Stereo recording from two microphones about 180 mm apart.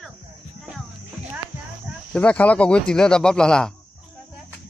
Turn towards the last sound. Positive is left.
turn(degrees=5)  # may be behind; listen again after turning